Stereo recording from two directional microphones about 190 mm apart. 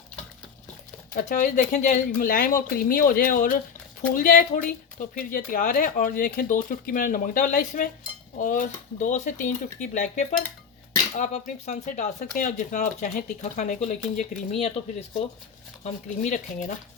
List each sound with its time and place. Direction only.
1.1 s speech: 40° left (ahead or behind)
15.8 s speech: 35° left (ahead or behind)